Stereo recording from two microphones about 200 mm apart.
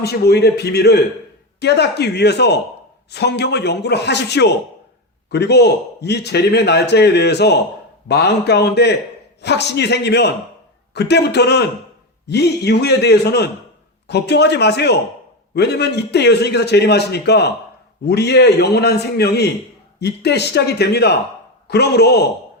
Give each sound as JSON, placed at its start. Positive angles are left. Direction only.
{"t": 0.0, "sound": "a man's voice", "side_deg": 55}